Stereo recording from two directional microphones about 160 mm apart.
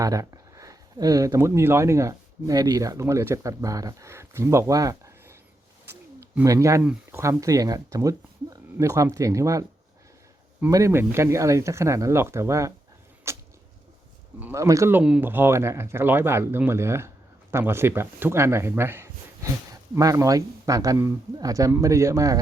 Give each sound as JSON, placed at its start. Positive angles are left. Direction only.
{"t": 0.0, "sound": "speech", "side_deg": -20}
{"t": 5.8, "sound": "a sound", "side_deg": -90}
{"t": 6.3, "sound": "speech", "side_deg": -20}
{"t": 10.7, "sound": "speech", "side_deg": -20}
{"t": 13.3, "sound": "a sound", "side_deg": -15}
{"t": 14.3, "sound": "speech", "side_deg": -15}